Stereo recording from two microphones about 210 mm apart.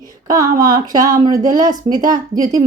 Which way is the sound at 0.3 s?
15° right (ahead or behind).